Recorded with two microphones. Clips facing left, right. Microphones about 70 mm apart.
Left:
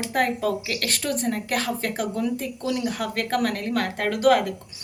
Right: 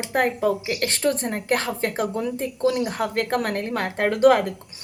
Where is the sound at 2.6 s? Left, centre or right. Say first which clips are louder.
Right 5 dB; right.